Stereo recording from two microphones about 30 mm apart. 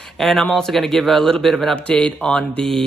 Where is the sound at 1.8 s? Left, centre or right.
Left.